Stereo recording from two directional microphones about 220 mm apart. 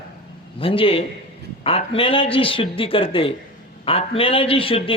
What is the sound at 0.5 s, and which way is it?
A man's voice, 25° left (ahead or behind).